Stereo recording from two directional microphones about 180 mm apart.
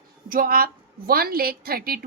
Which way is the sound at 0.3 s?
55° right (ahead or behind).